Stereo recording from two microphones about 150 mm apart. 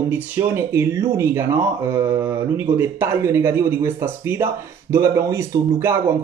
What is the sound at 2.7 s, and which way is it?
Speech, 15° right (ahead or behind).